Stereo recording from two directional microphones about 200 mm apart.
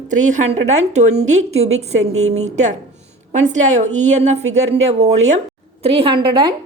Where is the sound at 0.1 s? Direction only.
35° right (ahead or behind).